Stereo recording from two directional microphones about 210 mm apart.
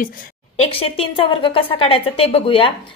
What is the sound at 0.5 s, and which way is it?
A woman's voice, 25° left (ahead or behind).